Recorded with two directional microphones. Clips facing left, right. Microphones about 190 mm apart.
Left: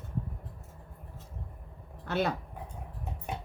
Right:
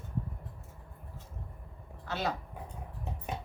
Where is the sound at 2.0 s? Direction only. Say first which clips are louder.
Left 5 dB; 55° left (ahead or behind).